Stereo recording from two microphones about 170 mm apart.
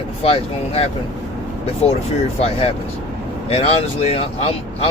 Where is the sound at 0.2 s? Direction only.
35° left (ahead or behind).